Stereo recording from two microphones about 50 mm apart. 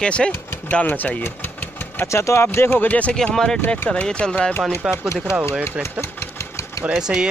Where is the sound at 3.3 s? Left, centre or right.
Centre.